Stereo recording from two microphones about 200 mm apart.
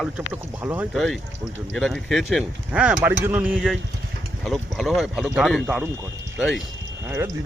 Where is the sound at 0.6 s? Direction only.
10° right (ahead or behind).